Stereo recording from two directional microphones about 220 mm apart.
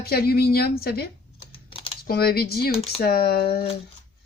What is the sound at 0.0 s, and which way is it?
Speech, 45° left (ahead or behind).